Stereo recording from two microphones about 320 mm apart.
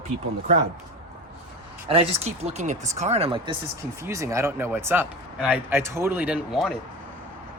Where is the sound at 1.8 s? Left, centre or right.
Centre.